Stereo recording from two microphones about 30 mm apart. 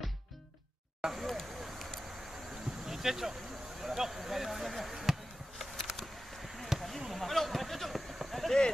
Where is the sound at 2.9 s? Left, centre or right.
Centre.